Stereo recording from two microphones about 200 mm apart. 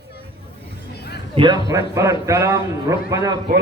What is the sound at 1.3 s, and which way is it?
A man's voice, 20° right (ahead or behind).